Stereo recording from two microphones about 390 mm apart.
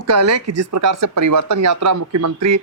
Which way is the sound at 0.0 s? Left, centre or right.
Right.